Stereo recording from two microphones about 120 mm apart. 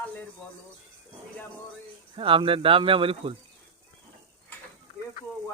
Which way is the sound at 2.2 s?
45° right (ahead or behind).